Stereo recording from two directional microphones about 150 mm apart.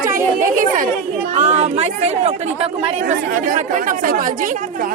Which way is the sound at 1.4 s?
50° right (ahead or behind).